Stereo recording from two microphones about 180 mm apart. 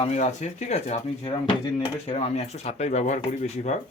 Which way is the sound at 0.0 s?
40° left (ahead or behind).